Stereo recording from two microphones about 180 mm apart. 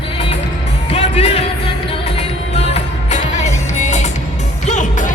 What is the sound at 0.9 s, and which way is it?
Music, 35° left (ahead or behind).